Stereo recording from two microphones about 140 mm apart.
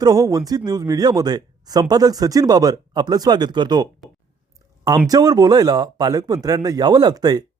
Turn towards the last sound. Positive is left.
turn(degrees=-30)  # may be behind; listen again after turning